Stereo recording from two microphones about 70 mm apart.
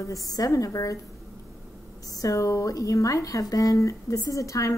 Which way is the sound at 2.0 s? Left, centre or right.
Left.